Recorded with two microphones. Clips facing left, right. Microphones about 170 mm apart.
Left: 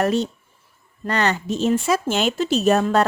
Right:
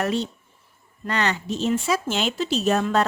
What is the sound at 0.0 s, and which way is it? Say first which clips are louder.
A woman's voice: left 4 dB; 45° left (ahead or behind).